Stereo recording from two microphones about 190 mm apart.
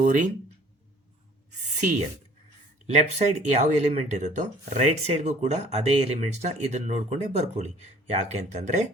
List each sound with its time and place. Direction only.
0.0 s speech: 45° right (ahead or behind)
1.7 s a sound: 40° right (ahead or behind)
2.9 s speech: 35° right (ahead or behind)